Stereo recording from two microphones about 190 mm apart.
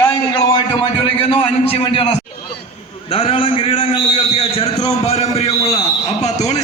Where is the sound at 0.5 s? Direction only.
25° left (ahead or behind).